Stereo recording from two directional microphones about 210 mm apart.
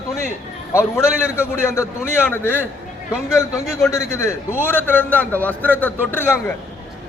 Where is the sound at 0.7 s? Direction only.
15° left (ahead or behind).